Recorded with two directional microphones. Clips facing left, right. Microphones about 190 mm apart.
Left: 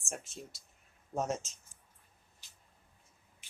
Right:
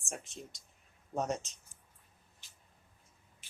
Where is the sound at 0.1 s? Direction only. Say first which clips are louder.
Left 1 dB; centre (ahead or behind).